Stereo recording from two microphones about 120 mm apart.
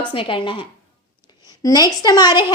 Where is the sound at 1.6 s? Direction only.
30° left (ahead or behind).